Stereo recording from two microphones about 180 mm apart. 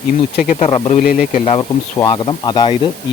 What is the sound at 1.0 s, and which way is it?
Speech, 50° left (ahead or behind).